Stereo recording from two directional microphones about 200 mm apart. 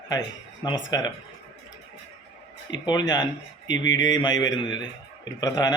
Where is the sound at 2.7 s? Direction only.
20° left (ahead or behind).